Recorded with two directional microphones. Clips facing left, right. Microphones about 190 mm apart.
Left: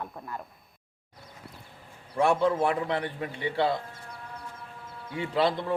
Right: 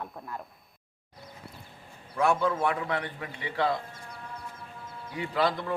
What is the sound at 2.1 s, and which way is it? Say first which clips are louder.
A man's voice: left 2 dB; 30° left (ahead or behind).